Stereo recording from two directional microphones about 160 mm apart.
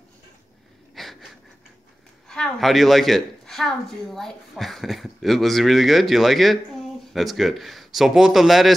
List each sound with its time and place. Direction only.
0.9 s wheeze: centre (ahead or behind)
2.2 s a woman's voice: 5° left (ahead or behind)